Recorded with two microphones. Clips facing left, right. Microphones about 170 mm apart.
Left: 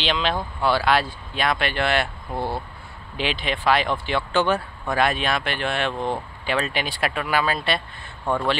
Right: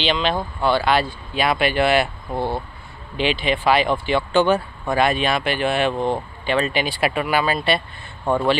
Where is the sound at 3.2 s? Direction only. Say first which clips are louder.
Right 5 dB; centre (ahead or behind).